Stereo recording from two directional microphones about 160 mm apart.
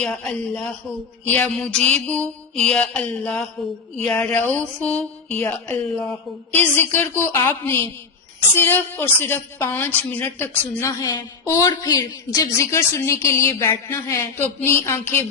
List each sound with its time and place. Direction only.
0.0 s a woman's voice: 5° left (ahead or behind)